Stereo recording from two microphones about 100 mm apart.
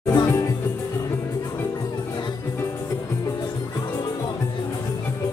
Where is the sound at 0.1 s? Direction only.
35° left (ahead or behind).